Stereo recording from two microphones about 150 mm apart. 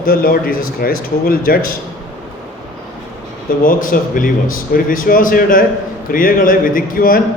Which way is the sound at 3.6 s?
65° left (ahead or behind).